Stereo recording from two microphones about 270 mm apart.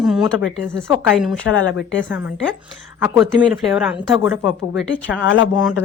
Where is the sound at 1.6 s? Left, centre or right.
Left.